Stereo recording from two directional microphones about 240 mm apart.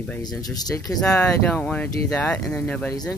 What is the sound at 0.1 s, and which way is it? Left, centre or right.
Speech, centre.